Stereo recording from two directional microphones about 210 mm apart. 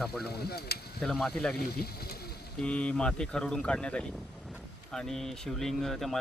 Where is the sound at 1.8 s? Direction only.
45° left (ahead or behind).